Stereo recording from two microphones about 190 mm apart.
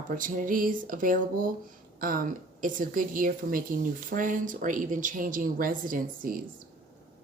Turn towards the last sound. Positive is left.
turn(degrees=-45)  # may be behind; listen again after turning